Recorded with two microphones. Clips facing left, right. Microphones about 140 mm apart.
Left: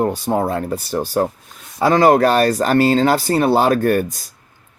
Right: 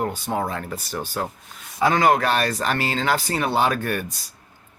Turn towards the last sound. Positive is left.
turn(degrees=45)  # may be behind; listen again after turning